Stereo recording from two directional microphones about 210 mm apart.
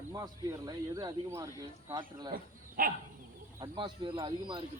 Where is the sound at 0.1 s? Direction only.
15° right (ahead or behind).